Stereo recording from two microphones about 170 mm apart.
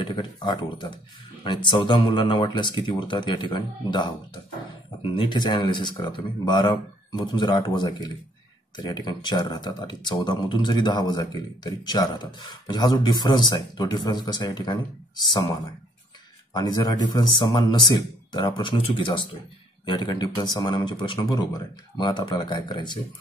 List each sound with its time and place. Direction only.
0.0 s speech: 30° left (ahead or behind)
5.1 s speech: 30° left (ahead or behind)
16.5 s speech: 25° left (ahead or behind)